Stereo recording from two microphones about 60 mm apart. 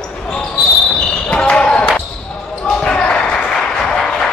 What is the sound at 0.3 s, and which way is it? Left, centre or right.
Basketball bounce, centre.